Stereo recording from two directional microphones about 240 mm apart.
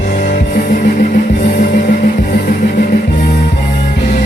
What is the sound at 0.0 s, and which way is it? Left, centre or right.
Music, left.